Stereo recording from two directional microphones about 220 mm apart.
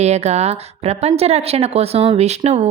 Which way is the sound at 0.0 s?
30° right (ahead or behind).